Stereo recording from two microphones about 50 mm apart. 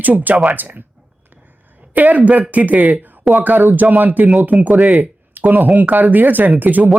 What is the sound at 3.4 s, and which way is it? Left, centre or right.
Speech, right.